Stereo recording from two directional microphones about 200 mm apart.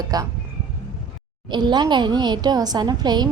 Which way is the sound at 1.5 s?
20° right (ahead or behind).